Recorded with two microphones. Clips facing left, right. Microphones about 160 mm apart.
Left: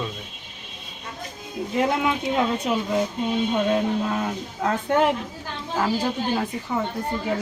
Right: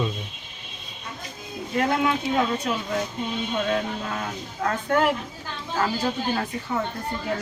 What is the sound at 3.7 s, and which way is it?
Speech, 20° left (ahead or behind).